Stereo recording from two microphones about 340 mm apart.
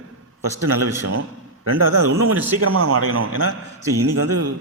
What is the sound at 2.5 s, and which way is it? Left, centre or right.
A man's voice, right.